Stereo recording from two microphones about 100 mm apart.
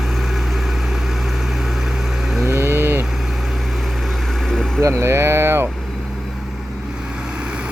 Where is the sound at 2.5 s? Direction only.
25° right (ahead or behind).